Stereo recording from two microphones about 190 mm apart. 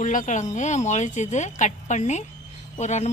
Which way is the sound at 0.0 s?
40° left (ahead or behind).